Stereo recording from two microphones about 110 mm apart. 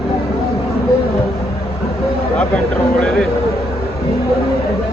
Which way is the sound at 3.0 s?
5° left (ahead or behind).